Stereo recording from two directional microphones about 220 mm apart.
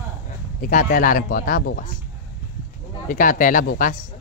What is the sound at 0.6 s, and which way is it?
Speech, 40° left (ahead or behind).